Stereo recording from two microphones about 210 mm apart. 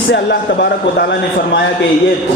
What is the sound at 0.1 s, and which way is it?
Speech, 50° left (ahead or behind).